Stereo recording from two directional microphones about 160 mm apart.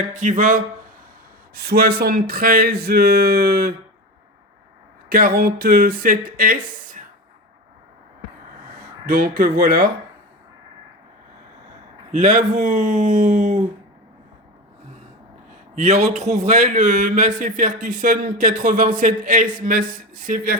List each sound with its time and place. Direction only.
0.0 s speech: 50° right (ahead or behind)
1.5 s speech: 75° right (ahead or behind)
5.0 s a man's voice: 65° right (ahead or behind)
9.0 s a man's voice: 70° right (ahead or behind)
12.1 s speech: 50° right (ahead or behind)
15.7 s a man's voice: 45° right (ahead or behind)